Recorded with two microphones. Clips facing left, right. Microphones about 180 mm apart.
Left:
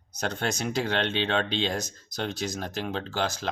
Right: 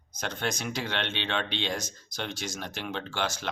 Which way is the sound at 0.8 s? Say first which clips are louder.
Left 8 dB; 35° left (ahead or behind).